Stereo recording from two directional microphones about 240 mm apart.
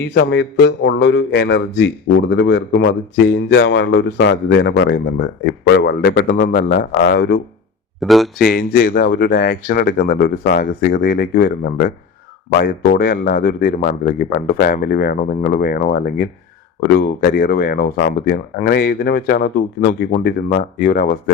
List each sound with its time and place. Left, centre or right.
0.1 s speech: left
7.9 s speech: centre
8.4 s speech: left